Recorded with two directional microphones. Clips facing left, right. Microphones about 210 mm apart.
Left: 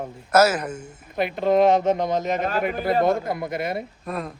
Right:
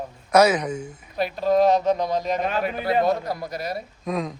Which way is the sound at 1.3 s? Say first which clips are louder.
Left 1 dB; 20° left (ahead or behind).